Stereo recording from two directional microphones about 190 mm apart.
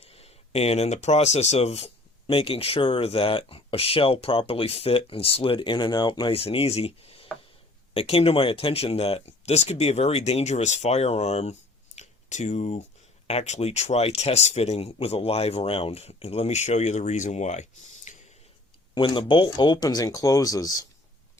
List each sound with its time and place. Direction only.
0.0 s speech: 35° left (ahead or behind)
11.9 s a sound: 40° left (ahead or behind)
13.2 s speech: 35° left (ahead or behind)
18.9 s speech: 25° left (ahead or behind)